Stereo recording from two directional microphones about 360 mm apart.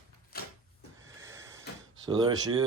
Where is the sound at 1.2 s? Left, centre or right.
Centre.